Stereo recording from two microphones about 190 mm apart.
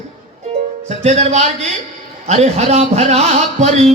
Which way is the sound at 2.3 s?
35° right (ahead or behind).